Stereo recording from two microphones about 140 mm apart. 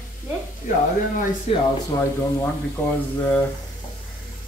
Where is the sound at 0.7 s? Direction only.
70° left (ahead or behind).